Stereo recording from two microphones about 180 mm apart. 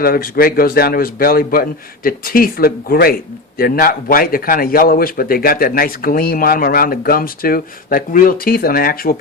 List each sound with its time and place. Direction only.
0.0 s a man's voice: 55° left (ahead or behind)